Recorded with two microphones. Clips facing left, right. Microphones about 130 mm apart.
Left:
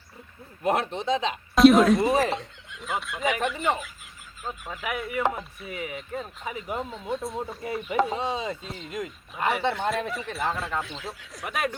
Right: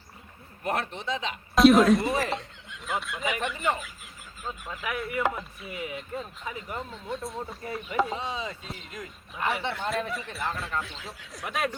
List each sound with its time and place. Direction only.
0.6 s speech: 20° left (ahead or behind)
1.5 s speech: centre (ahead or behind)
8.1 s speech: 30° left (ahead or behind)
9.3 s speech: centre (ahead or behind)